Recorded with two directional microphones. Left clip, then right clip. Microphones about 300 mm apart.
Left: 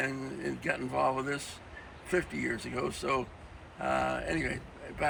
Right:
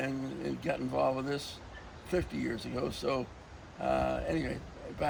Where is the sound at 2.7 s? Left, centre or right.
Centre.